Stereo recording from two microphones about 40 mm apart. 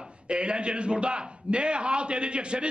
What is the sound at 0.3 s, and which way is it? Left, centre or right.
A man's voice, right.